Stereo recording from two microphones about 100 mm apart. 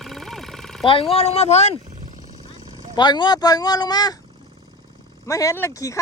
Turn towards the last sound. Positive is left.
turn(degrees=30)  # may be behind; listen again after turning